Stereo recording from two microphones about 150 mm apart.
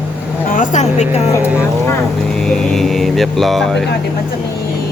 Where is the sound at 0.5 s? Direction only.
55° left (ahead or behind).